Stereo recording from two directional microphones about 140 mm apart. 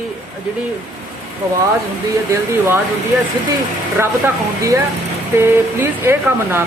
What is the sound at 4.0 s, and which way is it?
A woman's voice, 15° right (ahead or behind).